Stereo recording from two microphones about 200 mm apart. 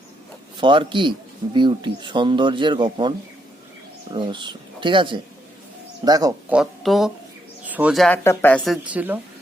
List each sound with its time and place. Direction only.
0.5 s speech: 25° right (ahead or behind)
4.1 s speech: 25° right (ahead or behind)
6.5 s speech: centre (ahead or behind)
8.9 s speech: 10° right (ahead or behind)